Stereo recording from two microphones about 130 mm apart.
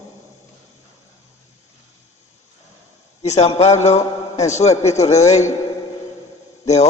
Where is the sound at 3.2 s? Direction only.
60° left (ahead or behind).